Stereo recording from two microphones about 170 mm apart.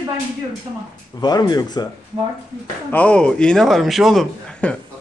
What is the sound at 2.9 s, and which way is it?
A man's voice, 10° left (ahead or behind).